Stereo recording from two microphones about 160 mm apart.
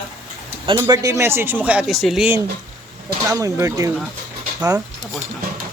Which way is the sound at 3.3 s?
20° right (ahead or behind).